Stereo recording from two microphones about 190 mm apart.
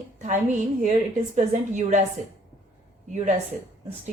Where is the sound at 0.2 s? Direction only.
40° right (ahead or behind).